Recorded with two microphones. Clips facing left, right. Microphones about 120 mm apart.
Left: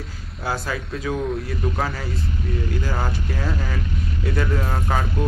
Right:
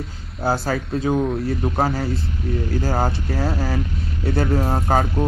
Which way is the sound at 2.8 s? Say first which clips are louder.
Right 5 dB; 45° right (ahead or behind).